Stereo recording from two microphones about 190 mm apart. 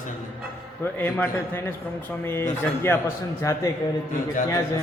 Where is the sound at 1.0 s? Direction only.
10° left (ahead or behind).